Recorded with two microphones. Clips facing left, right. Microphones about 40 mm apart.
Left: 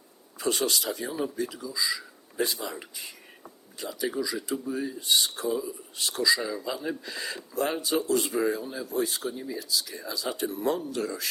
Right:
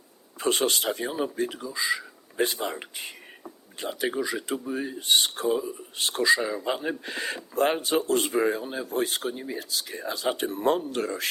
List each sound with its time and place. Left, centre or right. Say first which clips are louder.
0.3 s speech: right 3 dB; right